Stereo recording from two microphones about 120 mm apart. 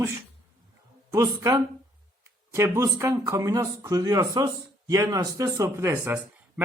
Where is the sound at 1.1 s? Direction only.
25° right (ahead or behind).